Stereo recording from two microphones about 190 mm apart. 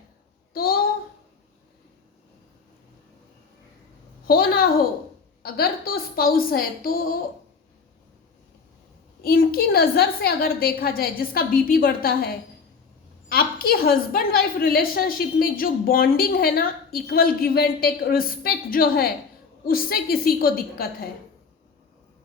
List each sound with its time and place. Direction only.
0.5 s child singing: 50° left (ahead or behind)
4.3 s a woman's voice: 50° left (ahead or behind)
9.2 s a woman's voice: 50° left (ahead or behind)